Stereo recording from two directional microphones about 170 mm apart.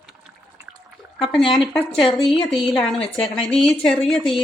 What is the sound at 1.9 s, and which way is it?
Speech, centre (ahead or behind).